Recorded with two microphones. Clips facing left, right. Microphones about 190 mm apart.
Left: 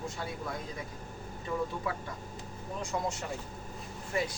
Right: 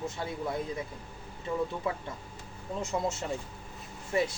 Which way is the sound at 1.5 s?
20° right (ahead or behind).